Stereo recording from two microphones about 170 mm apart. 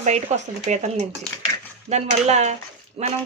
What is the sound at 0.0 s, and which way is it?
Speech, 40° right (ahead or behind).